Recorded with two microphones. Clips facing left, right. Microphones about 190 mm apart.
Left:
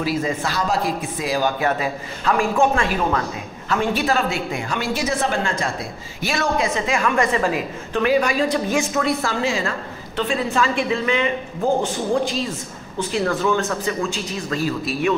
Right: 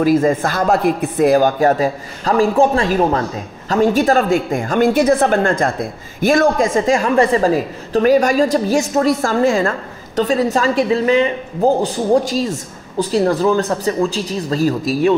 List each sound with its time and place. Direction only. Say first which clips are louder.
0.0 s speech: right 9 dB; 50° right (ahead or behind)